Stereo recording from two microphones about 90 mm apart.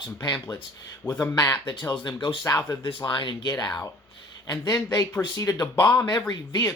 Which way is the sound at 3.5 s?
50° left (ahead or behind).